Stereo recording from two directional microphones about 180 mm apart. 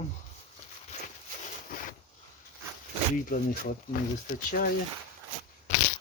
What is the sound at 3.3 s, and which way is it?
Speech, 50° left (ahead or behind).